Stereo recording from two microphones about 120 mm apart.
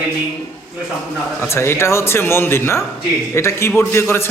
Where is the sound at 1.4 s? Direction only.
20° left (ahead or behind).